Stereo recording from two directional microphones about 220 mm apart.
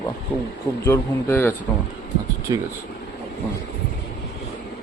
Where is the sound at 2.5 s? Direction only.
20° right (ahead or behind).